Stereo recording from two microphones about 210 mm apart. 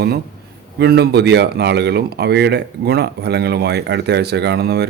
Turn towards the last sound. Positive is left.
turn(degrees=-50)  # may be behind; listen again after turning